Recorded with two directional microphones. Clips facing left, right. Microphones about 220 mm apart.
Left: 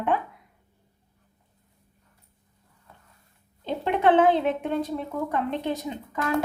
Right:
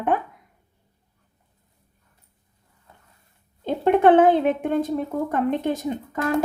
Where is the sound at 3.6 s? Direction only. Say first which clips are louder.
Right 6 dB; 50° right (ahead or behind).